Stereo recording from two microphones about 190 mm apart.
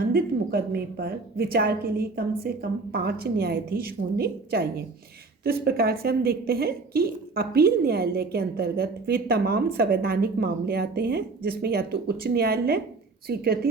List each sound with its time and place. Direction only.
0.0 s a woman's voice: 55° right (ahead or behind)